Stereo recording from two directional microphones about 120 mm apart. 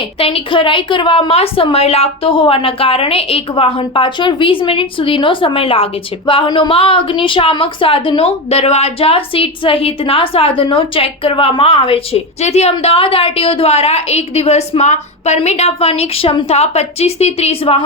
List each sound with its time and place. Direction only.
0.2 s a woman's voice: 55° left (ahead or behind)
12.8 s a woman's voice: 50° left (ahead or behind)